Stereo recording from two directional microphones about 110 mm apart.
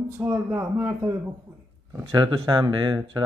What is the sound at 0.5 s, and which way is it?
Speech, 25° right (ahead or behind).